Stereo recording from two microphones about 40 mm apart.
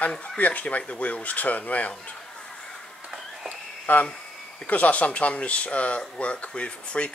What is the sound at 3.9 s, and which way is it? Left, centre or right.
Speech, left.